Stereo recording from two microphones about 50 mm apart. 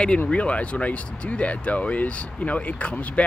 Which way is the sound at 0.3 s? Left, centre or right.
Left.